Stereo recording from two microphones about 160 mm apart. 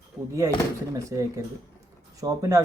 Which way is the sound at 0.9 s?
20° right (ahead or behind).